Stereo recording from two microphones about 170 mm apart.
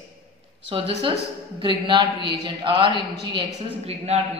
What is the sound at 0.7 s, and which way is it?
Mantra, 30° right (ahead or behind).